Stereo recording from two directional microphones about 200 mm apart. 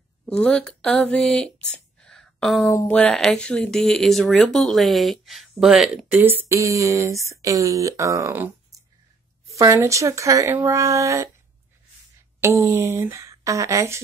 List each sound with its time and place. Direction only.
0.2 s speech: 5° left (ahead or behind); by 11.2 s 15° right (ahead or behind)
12.4 s speech: 15° right (ahead or behind)